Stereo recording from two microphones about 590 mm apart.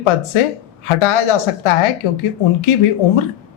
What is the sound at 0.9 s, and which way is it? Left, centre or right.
Speech, left.